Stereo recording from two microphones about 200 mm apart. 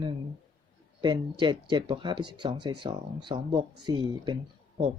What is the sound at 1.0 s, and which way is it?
Speech, 25° right (ahead or behind).